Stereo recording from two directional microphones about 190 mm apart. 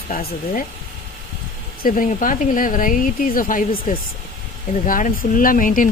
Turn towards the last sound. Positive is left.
turn(degrees=45)  # may be behind; listen again after turning